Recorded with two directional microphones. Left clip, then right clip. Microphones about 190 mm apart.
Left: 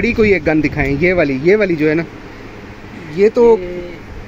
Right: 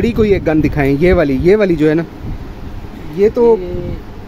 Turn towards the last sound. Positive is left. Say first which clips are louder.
# even
turn(degrees=-5)  # may be behind; listen again after turning